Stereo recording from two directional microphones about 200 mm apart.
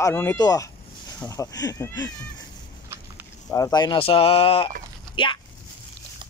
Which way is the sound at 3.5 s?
20° left (ahead or behind).